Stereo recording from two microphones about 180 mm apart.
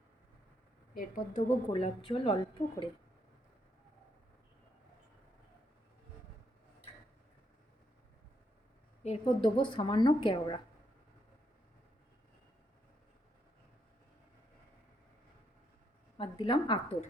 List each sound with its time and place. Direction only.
0.9 s a woman's voice: 45° left (ahead or behind); by 2.9 s 30° left (ahead or behind)
9.0 s a woman's voice: 30° left (ahead or behind)
16.1 s a woman's voice: 30° left (ahead or behind)